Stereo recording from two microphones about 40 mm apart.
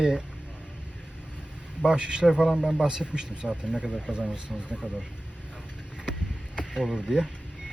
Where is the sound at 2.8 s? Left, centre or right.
Right.